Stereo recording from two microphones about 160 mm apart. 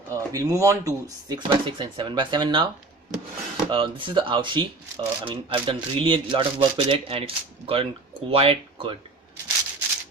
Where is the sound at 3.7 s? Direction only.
30° right (ahead or behind).